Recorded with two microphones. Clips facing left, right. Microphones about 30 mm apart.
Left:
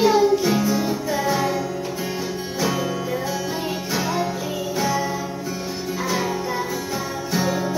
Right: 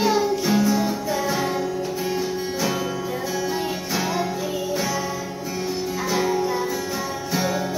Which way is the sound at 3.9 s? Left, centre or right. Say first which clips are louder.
Left 1 dB; centre.